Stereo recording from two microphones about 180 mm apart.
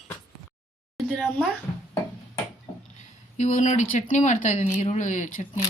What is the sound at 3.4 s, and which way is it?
Speech, 40° left (ahead or behind).